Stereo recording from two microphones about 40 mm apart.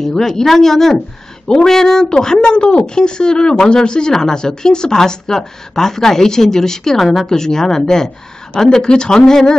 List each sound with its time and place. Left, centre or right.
0.0 s a woman's voice: centre